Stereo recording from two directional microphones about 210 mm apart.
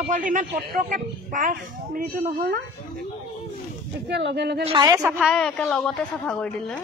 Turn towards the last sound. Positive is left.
turn(degrees=5)  # may be behind; listen again after turning